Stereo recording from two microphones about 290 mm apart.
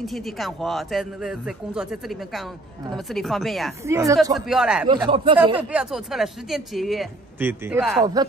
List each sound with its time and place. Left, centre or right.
0.0 s speech: centre
3.8 s speech: centre
4.8 s speech: centre
5.6 s speech: centre